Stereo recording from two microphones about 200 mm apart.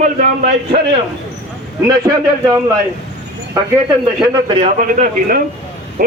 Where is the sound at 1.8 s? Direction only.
20° right (ahead or behind).